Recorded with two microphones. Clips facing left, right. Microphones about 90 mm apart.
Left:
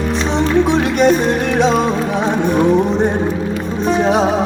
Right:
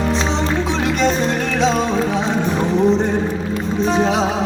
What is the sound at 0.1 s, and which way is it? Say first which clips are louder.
Music: left 3 dB; 55° left (ahead or behind).